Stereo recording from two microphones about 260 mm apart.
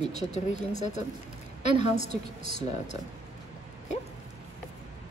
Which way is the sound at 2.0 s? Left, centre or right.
Right.